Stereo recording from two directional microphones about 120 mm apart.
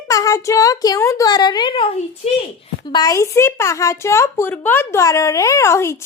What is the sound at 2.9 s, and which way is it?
Speech, 30° left (ahead or behind).